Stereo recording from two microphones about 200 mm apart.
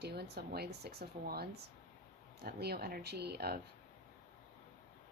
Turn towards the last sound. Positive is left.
turn(degrees=-50)  # may be behind; listen again after turning